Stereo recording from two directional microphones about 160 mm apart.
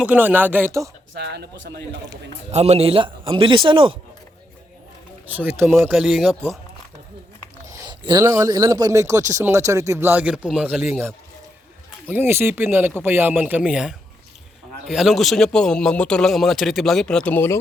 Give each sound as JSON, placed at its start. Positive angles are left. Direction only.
{"t": 0.0, "sound": "a man's voice", "side_deg": -10}
{"t": 1.1, "sound": "speech", "side_deg": -90}
{"t": 2.5, "sound": "speech", "side_deg": -45}
{"t": 5.3, "sound": "a man's voice", "side_deg": -15}
{"t": 5.9, "sound": "a man's voice", "side_deg": -5}
{"t": 7.7, "sound": "a man's voice", "side_deg": -25}
{"t": 12.0, "sound": "a man's voice", "side_deg": -10}